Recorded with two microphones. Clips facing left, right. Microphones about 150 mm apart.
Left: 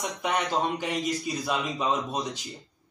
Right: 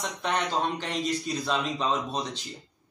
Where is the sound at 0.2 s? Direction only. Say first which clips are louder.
Left 1 dB; 10° left (ahead or behind).